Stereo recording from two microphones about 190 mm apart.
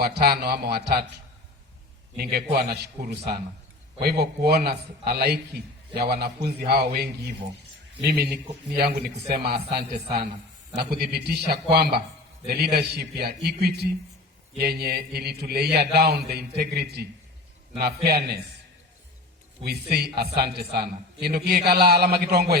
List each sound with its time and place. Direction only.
0.0 s a man's voice: 55° right (ahead or behind)
2.1 s a man's voice: 60° right (ahead or behind)
19.6 s a man's voice: 55° right (ahead or behind)